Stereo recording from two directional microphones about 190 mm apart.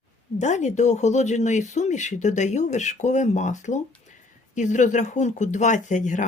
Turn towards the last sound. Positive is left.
turn(degrees=40)  # may be behind; listen again after turning